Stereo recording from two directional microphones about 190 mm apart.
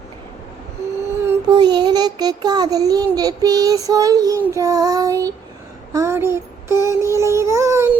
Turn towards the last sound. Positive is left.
turn(degrees=-15)  # may be behind; listen again after turning